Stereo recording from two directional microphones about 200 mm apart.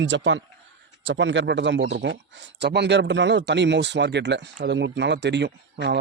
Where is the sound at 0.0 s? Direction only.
70° right (ahead or behind).